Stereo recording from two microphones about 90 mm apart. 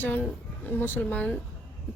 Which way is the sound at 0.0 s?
15° left (ahead or behind).